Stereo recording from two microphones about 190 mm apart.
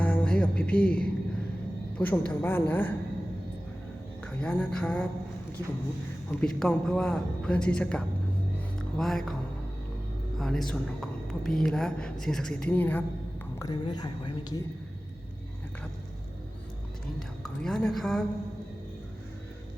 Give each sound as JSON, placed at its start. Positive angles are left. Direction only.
{"t": 0.0, "sound": "music", "side_deg": 5}
{"t": 2.0, "sound": "a woman's voice", "side_deg": 10}
{"t": 4.2, "sound": "a woman's voice", "side_deg": 5}
{"t": 6.4, "sound": "a woman's voice", "side_deg": 5}
{"t": 10.3, "sound": "a woman's voice", "side_deg": 0}
{"t": 13.6, "sound": "a woman's voice", "side_deg": 20}
{"t": 17.2, "sound": "a woman's voice", "side_deg": 0}